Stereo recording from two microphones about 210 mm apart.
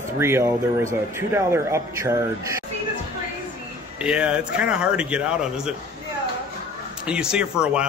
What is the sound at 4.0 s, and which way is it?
Speech, 5° right (ahead or behind).